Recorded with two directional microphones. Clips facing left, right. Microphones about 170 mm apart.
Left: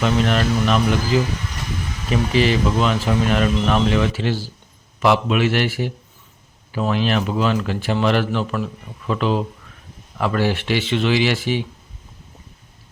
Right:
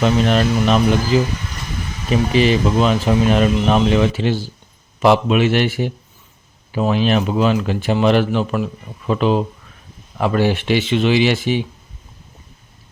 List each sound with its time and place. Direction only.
0.0 s speech: 20° right (ahead or behind)